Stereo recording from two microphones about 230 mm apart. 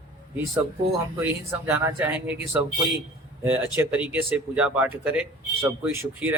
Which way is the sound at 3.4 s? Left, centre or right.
Centre.